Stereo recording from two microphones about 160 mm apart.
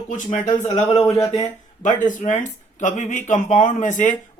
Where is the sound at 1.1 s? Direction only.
20° left (ahead or behind).